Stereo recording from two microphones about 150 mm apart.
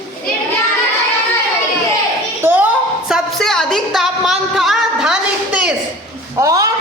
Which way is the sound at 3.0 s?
Centre (ahead or behind).